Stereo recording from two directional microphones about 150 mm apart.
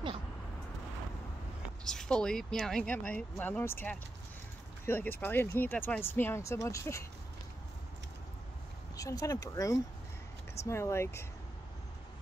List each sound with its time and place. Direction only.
1.9 s speech: 5° left (ahead or behind)
8.9 s speech: 25° left (ahead or behind)